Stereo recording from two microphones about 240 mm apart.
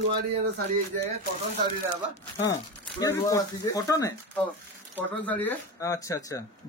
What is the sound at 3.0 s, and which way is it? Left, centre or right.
Speech, centre.